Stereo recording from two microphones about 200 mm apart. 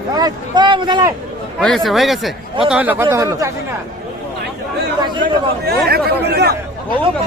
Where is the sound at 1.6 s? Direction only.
5° left (ahead or behind); by 3.5 s 15° right (ahead or behind).